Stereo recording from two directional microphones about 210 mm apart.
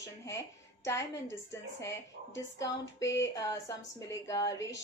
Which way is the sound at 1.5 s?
15° left (ahead or behind).